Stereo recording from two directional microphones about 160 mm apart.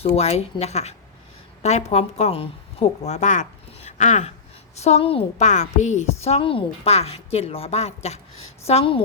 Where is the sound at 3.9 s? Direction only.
50° left (ahead or behind).